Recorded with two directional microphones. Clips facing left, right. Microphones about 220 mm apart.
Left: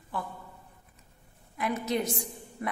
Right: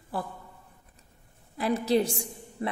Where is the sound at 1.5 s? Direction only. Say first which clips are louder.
Right 5 dB; 30° right (ahead or behind).